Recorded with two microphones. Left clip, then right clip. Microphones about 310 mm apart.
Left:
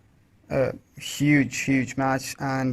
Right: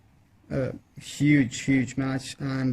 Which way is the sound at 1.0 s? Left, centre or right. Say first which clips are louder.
Left 1 dB; left.